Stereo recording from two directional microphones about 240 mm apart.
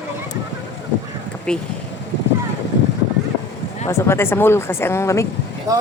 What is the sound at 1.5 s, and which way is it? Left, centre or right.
Speech, centre.